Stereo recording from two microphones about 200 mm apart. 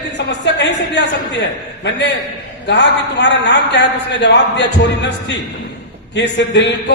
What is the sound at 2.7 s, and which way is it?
Speech, 60° left (ahead or behind).